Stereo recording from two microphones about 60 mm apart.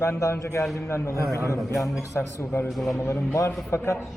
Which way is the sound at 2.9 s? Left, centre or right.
Left.